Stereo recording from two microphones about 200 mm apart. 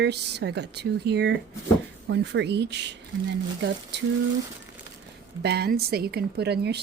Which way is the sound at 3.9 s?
60° right (ahead or behind).